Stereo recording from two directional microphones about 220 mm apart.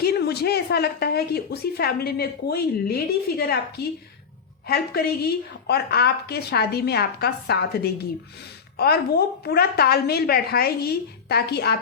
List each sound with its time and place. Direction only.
0.0 s speech: 45° left (ahead or behind)
4.7 s speech: 45° left (ahead or behind)